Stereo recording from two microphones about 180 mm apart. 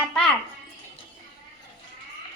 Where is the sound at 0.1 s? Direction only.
5° left (ahead or behind).